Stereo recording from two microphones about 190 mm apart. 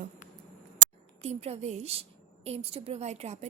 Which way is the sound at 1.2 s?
35° right (ahead or behind).